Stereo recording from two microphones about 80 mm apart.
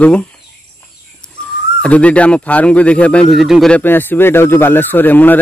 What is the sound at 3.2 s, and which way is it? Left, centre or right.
Speech, centre.